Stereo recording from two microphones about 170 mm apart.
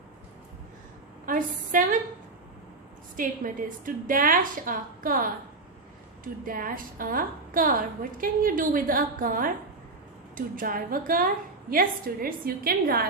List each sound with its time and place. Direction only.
1.2 s a woman's voice: 55° right (ahead or behind)
3.2 s a woman's voice: 50° right (ahead or behind)